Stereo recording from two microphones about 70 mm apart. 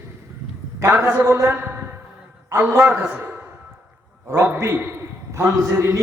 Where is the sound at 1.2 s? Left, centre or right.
Right.